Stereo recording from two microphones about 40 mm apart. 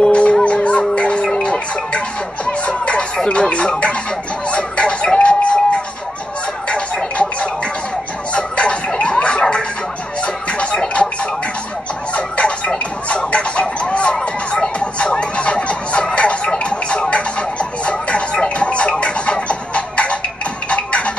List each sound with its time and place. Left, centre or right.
0.0 s music: left
3.2 s speech: left
4.5 s fowl: left
6.7 s music: left
12.1 s music: left